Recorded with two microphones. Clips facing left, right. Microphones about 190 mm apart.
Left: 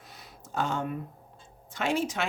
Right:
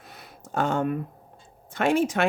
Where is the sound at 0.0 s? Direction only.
55° right (ahead or behind).